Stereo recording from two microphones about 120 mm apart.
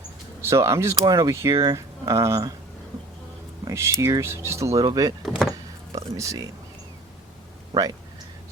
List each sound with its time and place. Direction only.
0.4 s speech: 25° right (ahead or behind)
3.7 s speech: 25° right (ahead or behind)
5.2 s speech: centre (ahead or behind)
5.9 s speech: 30° right (ahead or behind)
7.7 s speech: 30° right (ahead or behind)